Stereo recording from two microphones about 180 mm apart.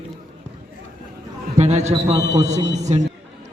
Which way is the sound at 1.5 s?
35° right (ahead or behind).